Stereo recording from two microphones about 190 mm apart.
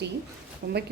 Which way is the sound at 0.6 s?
55° right (ahead or behind).